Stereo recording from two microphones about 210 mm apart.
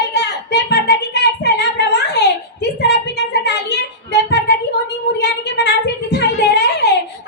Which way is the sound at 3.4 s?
50° left (ahead or behind).